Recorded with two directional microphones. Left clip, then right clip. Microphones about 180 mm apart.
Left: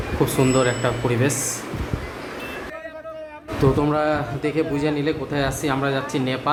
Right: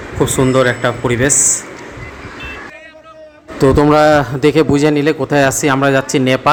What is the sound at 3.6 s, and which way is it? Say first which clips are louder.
A man's voice: right 11 dB; 50° right (ahead or behind).